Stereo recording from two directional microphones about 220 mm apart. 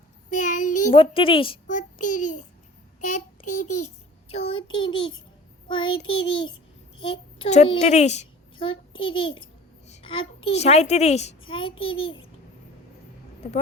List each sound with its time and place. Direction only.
0.3 s child singing: 35° left (ahead or behind)
0.9 s a child's voice: 25° left (ahead or behind)
1.7 s a child's voice: 35° left (ahead or behind)
3.0 s child singing: 35° left (ahead or behind)
4.3 s a child's voice: 25° left (ahead or behind)
11.7 s a child's voice: 65° left (ahead or behind)